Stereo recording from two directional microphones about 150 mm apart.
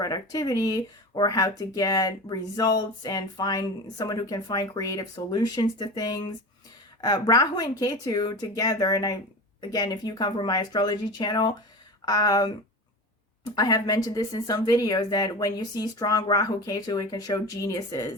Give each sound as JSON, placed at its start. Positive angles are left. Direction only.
{"t": 0.0, "sound": "speech", "side_deg": 25}